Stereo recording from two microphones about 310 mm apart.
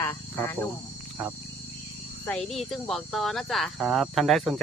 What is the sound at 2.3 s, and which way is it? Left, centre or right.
Speech, centre.